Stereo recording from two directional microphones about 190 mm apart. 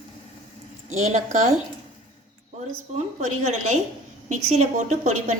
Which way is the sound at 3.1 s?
35° right (ahead or behind).